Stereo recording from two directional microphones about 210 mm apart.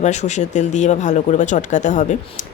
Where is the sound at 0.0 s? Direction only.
35° left (ahead or behind).